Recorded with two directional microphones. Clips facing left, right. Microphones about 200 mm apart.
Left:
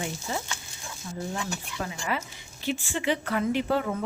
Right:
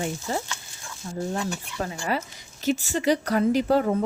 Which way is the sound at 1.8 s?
40° right (ahead or behind).